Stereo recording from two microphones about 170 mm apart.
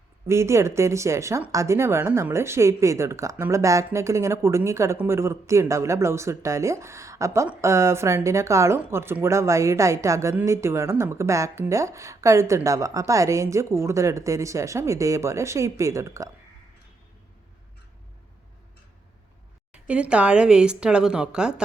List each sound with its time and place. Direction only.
0.3 s speech: 15° right (ahead or behind)
19.7 s speech: 5° right (ahead or behind)